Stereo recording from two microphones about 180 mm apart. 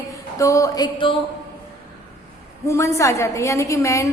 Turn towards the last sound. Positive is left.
turn(degrees=15)  # may be behind; listen again after turning